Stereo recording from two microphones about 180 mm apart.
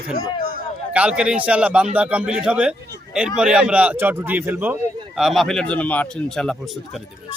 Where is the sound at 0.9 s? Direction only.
5° right (ahead or behind).